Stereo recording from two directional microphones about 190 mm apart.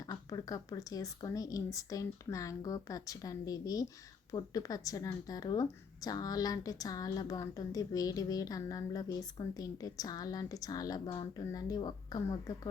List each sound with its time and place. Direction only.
0.0 s a woman's voice: 20° left (ahead or behind)